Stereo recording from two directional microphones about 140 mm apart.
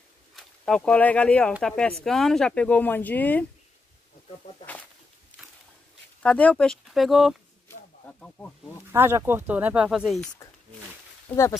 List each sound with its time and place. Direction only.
0.4 s speech: 5° left (ahead or behind)
6.2 s speech: 10° left (ahead or behind)
7.6 s a sound: 10° left (ahead or behind)
8.9 s speech: 15° right (ahead or behind); by 10.3 s centre (ahead or behind)
11.2 s speech: 20° left (ahead or behind)